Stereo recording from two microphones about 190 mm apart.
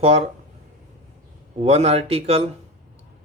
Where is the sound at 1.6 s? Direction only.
35° right (ahead or behind).